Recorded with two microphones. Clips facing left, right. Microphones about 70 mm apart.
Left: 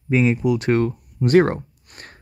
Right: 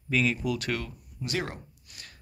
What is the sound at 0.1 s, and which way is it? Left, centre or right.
Speech, left.